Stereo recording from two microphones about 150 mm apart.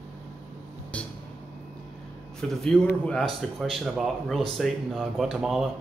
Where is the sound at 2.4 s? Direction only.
5° left (ahead or behind).